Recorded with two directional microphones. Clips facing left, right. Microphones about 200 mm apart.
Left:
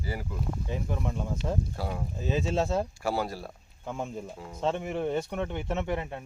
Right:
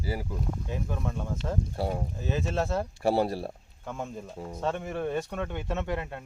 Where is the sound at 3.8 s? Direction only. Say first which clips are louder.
Left 2 dB; 15° left (ahead or behind).